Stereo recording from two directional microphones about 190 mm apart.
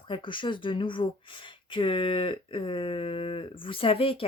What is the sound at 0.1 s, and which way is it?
Speech, 25° left (ahead or behind).